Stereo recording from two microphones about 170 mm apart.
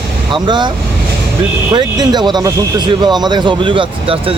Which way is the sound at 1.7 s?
25° right (ahead or behind).